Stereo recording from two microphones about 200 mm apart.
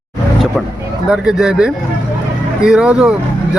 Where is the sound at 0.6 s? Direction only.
Centre (ahead or behind).